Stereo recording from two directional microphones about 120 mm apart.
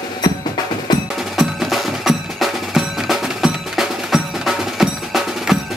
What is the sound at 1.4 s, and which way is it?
Percussion, centre (ahead or behind).